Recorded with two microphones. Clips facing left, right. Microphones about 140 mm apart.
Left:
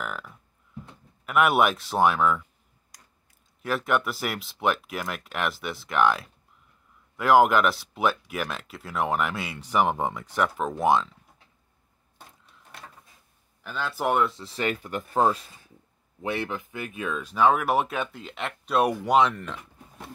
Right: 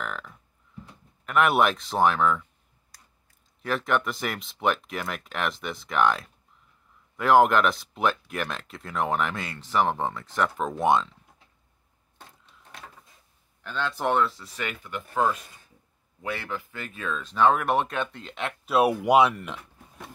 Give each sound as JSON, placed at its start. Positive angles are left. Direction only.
{"t": 0.0, "sound": "a sound", "side_deg": 5}
{"t": 1.2, "sound": "speech", "side_deg": 5}
{"t": 3.6, "sound": "speech", "side_deg": 5}
{"t": 13.6, "sound": "speech", "side_deg": 5}
{"t": 14.3, "sound": "speech", "side_deg": 30}